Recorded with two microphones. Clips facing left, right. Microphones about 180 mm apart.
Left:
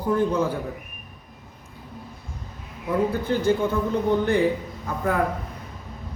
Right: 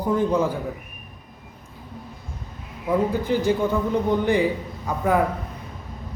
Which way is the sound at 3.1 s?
15° right (ahead or behind).